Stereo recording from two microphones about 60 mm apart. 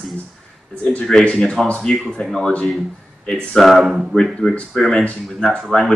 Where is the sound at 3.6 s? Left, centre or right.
Centre.